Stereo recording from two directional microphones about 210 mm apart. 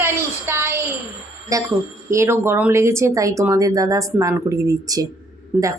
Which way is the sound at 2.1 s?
10° right (ahead or behind).